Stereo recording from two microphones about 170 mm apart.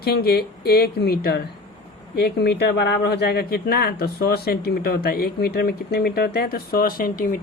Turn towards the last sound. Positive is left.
turn(degrees=55)  # may be behind; listen again after turning